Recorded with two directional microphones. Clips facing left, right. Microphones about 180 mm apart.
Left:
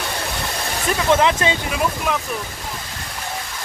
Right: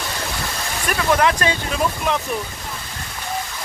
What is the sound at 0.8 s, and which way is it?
Speech, 20° left (ahead or behind).